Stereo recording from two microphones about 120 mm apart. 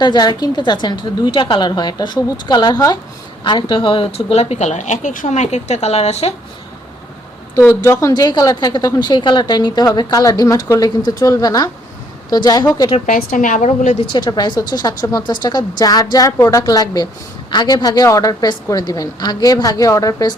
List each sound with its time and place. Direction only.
0.0 s a woman's voice: 35° left (ahead or behind); by 6.3 s 60° left (ahead or behind)
7.5 s a woman's voice: 25° left (ahead or behind)
13.1 s a woman's voice: 90° left
14.1 s a woman's voice: 40° left (ahead or behind)